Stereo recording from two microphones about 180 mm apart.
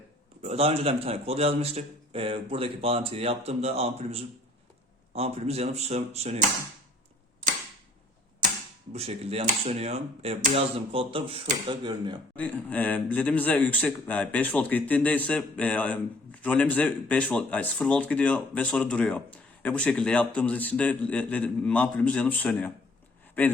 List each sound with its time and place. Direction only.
0.4 s a man's voice: 35° right (ahead or behind)
8.9 s a man's voice: 35° right (ahead or behind)
12.4 s speech: 10° left (ahead or behind)